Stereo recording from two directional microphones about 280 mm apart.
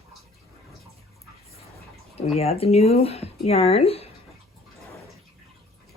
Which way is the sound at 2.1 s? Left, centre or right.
Left.